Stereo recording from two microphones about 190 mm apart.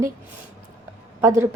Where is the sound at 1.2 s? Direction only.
15° right (ahead or behind).